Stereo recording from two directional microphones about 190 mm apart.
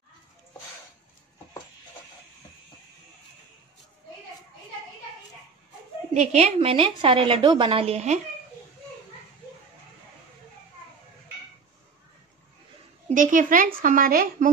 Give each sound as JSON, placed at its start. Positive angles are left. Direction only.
{"t": 6.1, "sound": "a woman's voice", "side_deg": -35}
{"t": 13.1, "sound": "a woman's voice", "side_deg": -45}